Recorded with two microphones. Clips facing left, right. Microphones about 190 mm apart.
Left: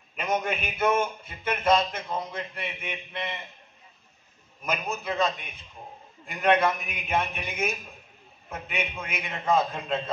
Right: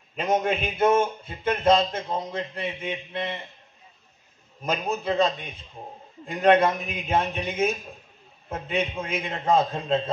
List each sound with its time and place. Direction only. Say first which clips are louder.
0.1 s a man's voice: right 4 dB; 30° right (ahead or behind)
4.6 s a man's voice: right 4 dB; 30° right (ahead or behind)